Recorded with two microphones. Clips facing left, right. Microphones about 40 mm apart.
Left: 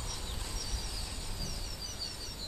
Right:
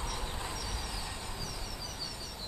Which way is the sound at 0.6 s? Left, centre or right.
Centre.